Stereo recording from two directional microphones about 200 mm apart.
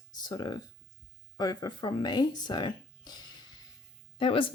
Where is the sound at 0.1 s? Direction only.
20° left (ahead or behind).